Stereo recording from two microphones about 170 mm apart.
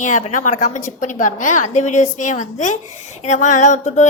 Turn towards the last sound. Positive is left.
turn(degrees=45)  # may be behind; listen again after turning